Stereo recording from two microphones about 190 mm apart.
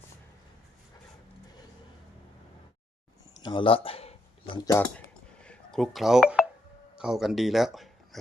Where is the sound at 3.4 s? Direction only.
25° left (ahead or behind).